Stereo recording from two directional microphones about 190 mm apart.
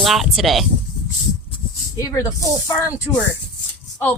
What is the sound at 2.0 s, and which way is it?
A woman's voice, 15° left (ahead or behind).